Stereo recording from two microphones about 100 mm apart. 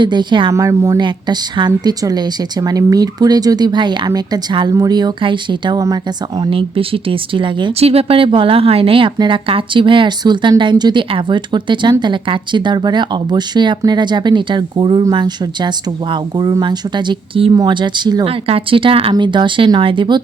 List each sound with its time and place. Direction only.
0.0 s speech: 50° right (ahead or behind)
0.5 s speech: 30° right (ahead or behind)
0.9 s speech: 50° right (ahead or behind)
5.8 s speech: 40° right (ahead or behind)
6.5 s speech: 65° right (ahead or behind)
7.8 s speech: 85° right; by 9.1 s 65° right (ahead or behind)
9.1 s speech: 55° right (ahead or behind)
17.5 s speech: 45° right (ahead or behind)
18.3 s speech: 70° right (ahead or behind)
19.1 s speech: 50° right (ahead or behind)